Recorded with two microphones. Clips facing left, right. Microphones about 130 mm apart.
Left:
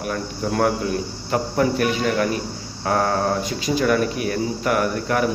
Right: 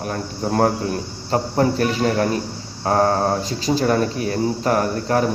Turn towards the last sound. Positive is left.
turn(degrees=-35)  # may be behind; listen again after turning